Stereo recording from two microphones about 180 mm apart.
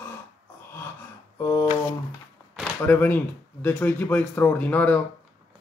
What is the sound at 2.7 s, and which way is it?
A man's voice, 10° left (ahead or behind).